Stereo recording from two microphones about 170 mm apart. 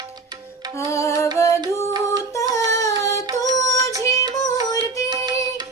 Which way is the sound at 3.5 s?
20° left (ahead or behind).